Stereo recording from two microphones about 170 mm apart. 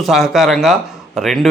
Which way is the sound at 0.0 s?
Centre (ahead or behind).